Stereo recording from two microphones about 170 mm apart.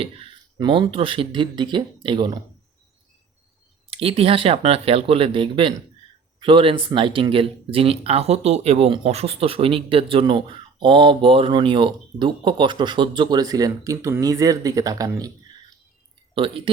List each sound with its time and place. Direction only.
0.0 s speech: 35° right (ahead or behind)
3.8 s speech: 35° right (ahead or behind)
16.3 s speech: 30° right (ahead or behind)